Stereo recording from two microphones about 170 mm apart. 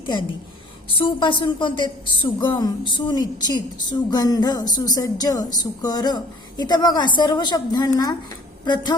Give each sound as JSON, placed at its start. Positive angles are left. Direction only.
{"t": 0.9, "sound": "a woman's voice", "side_deg": 30}